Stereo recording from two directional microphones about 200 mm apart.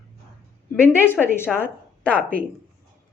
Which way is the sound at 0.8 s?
10° left (ahead or behind).